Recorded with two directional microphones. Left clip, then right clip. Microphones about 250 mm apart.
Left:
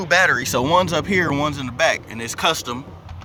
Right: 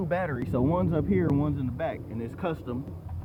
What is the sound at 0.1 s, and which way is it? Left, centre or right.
Speech, centre.